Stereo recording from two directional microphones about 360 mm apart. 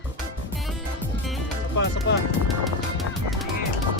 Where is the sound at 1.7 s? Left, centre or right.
Left.